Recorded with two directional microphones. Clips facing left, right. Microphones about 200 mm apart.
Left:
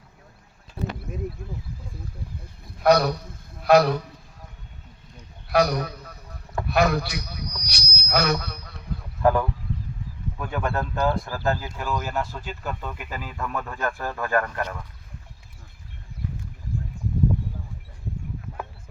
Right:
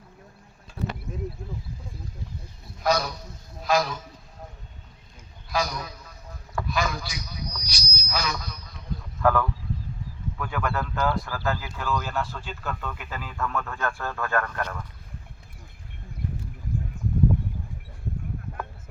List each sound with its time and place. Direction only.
2.7 s a man's voice: 60° left (ahead or behind)
5.5 s a sound: 65° left (ahead or behind)
9.2 s a man's voice: 20° left (ahead or behind)